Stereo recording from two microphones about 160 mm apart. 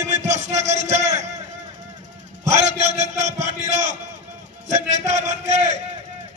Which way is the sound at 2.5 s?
45° right (ahead or behind).